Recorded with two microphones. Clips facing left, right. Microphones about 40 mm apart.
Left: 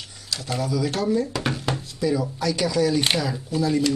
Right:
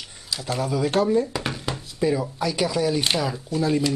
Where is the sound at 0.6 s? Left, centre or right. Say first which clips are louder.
Right 3 dB; right.